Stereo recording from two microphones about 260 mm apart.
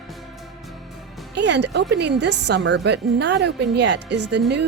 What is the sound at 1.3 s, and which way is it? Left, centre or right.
A woman's voice, right.